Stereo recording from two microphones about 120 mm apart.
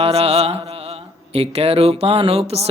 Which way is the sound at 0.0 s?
55° right (ahead or behind).